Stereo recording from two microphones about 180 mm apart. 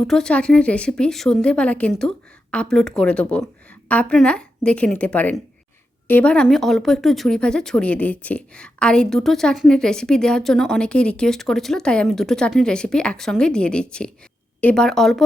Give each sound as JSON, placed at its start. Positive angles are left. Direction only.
{"t": 0.1, "sound": "a woman's voice", "side_deg": 5}